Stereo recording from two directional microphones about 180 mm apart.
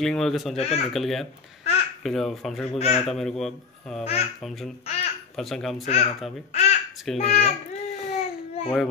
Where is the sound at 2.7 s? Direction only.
35° left (ahead or behind).